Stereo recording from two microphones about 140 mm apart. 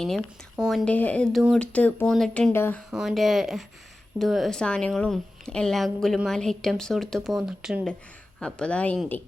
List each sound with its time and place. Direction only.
0.0 s speech: 5° left (ahead or behind)
0.9 s speech: 10° left (ahead or behind)
1.3 s speech: 5° right (ahead or behind)
1.5 s speech: 10° left (ahead or behind)
2.5 s speech: 15° left (ahead or behind)
2.9 s speech: centre (ahead or behind)